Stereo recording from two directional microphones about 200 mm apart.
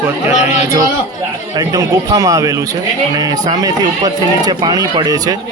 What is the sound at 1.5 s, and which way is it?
Speech, 15° right (ahead or behind).